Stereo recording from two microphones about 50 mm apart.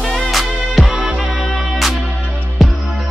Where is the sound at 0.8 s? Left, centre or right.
Right.